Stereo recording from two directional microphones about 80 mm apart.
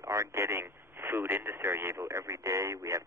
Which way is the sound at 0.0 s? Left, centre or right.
Right.